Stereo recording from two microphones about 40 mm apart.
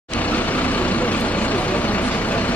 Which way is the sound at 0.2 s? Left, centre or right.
Left.